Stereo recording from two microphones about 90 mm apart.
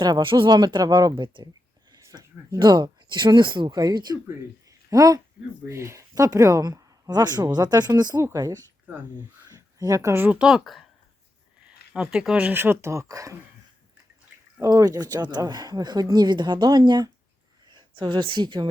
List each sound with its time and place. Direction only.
0.2 s speech: 70° right (ahead or behind)
2.0 s a sound: 35° right (ahead or behind)
2.6 s speech: 55° right (ahead or behind)
8.2 s speech: 35° right (ahead or behind)
9.5 s a sound: 45° right (ahead or behind)
10.2 s speech: 15° right (ahead or behind)
11.9 s speech: 10° right (ahead or behind)
12.5 s speech: 25° right (ahead or behind)
14.6 s speech: 40° right (ahead or behind); by 18.7 s 60° right (ahead or behind)